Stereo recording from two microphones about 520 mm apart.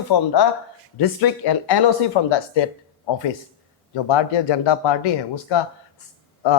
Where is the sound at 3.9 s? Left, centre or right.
Left.